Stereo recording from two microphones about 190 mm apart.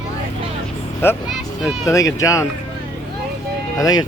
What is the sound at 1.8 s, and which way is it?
Speech, 15° left (ahead or behind).